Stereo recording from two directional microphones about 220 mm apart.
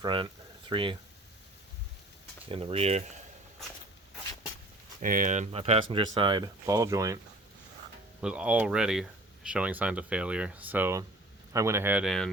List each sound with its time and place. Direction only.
0.0 s speech: 20° right (ahead or behind)
2.5 s speech: 25° right (ahead or behind)
5.0 s speech: 40° right (ahead or behind); by 7.2 s 15° right (ahead or behind)
8.2 s speech: 5° right (ahead or behind)